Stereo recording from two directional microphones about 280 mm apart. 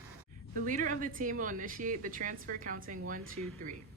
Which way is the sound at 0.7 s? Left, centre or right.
Right.